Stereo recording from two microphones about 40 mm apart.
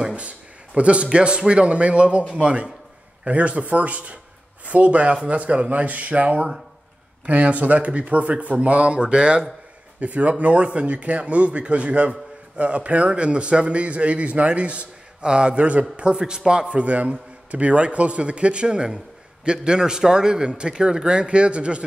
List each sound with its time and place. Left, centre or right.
0.7 s a man's voice: right
2.2 s a man's voice: centre
3.3 s speech: right
9.9 s a man's voice: right